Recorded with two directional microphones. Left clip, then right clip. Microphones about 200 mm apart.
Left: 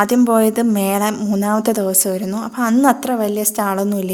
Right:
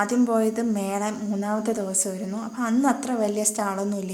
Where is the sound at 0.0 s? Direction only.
40° left (ahead or behind).